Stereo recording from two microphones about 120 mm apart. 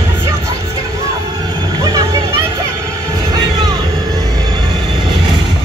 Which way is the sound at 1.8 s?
35° right (ahead or behind).